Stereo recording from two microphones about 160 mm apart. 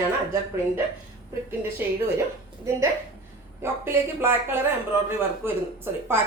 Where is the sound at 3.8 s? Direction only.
15° right (ahead or behind).